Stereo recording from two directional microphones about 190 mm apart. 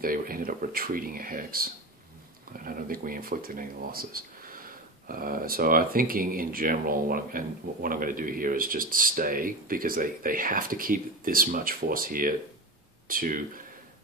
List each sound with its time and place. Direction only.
0.0 s speech: 50° right (ahead or behind)